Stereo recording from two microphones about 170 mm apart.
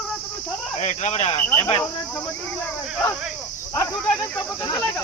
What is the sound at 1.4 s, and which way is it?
Speech, 15° left (ahead or behind).